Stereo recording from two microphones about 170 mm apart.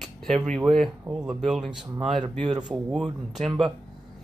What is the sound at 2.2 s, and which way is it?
Speech, 30° right (ahead or behind).